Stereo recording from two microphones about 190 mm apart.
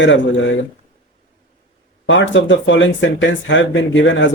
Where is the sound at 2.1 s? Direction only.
80° left.